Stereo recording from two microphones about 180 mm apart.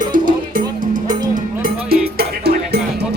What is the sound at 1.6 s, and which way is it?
Music, 60° right (ahead or behind).